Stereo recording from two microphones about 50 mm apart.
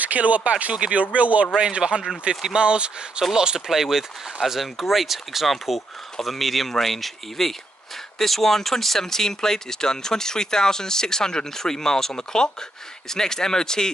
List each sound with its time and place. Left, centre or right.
0.0 s speech: right; by 13.9 s centre